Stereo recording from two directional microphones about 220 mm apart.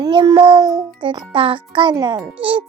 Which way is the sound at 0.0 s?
20° right (ahead or behind).